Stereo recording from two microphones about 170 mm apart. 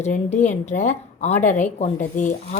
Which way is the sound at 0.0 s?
40° left (ahead or behind).